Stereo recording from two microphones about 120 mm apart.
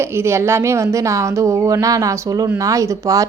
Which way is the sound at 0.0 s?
20° right (ahead or behind).